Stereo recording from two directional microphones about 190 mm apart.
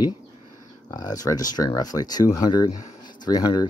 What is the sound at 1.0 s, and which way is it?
Speech, 20° left (ahead or behind).